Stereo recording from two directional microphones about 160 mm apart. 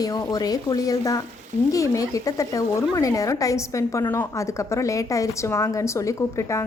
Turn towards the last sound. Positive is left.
turn(degrees=20)  # may be behind; listen again after turning